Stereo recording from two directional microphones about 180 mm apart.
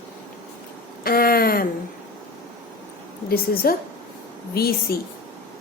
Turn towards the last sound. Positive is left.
turn(degrees=60)  # may be behind; listen again after turning